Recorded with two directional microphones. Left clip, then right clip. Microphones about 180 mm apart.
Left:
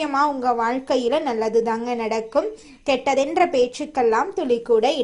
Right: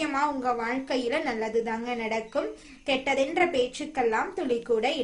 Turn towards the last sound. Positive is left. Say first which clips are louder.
# left 8 dB
turn(degrees=30)  # may be behind; listen again after turning